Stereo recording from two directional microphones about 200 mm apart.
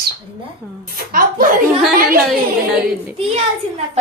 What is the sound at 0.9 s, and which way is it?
A child's voice, 45° right (ahead or behind).